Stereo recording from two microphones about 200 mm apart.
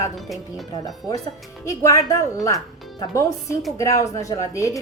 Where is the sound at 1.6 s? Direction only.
15° left (ahead or behind).